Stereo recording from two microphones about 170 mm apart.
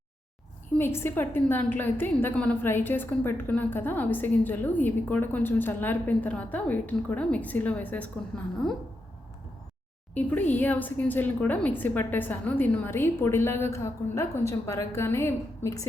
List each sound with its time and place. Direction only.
0.8 s a woman's voice: 15° left (ahead or behind)
10.2 s a woman's voice: 10° left (ahead or behind)